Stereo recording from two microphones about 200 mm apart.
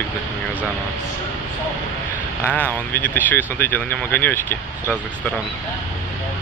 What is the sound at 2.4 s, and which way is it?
Speech, 10° left (ahead or behind).